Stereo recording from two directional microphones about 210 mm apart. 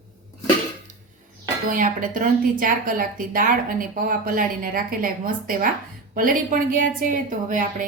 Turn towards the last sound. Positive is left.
turn(degrees=-40)  # may be behind; listen again after turning